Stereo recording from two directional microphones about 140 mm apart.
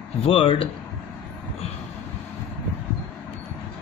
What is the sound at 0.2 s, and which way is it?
Speech, 40° left (ahead or behind).